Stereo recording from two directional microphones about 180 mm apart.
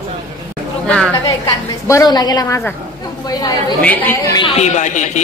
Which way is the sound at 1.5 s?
20° left (ahead or behind).